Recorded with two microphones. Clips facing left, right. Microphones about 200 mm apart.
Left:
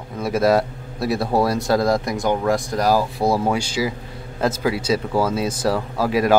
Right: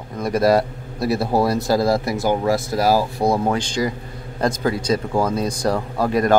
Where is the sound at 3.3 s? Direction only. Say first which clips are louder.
Even; 5° left (ahead or behind).